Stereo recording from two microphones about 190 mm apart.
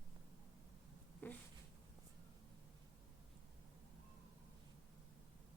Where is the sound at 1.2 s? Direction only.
10° left (ahead or behind).